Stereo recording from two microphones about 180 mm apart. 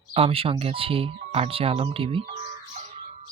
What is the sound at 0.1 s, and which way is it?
Speech, 30° right (ahead or behind).